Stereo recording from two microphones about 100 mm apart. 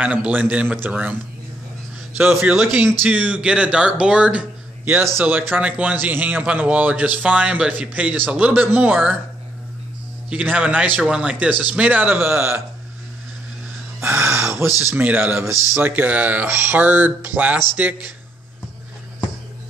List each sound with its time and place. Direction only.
0.0 s a man's voice: 15° right (ahead or behind)
2.1 s a man's voice: 20° right (ahead or behind)
10.3 s a man's voice: 15° right (ahead or behind)
14.0 s a man's voice: 25° right (ahead or behind)